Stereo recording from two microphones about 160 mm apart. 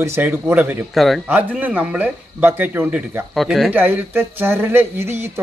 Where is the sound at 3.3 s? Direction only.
Centre (ahead or behind).